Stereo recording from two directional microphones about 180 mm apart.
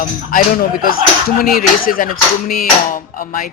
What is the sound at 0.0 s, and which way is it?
Speech, 50° left (ahead or behind).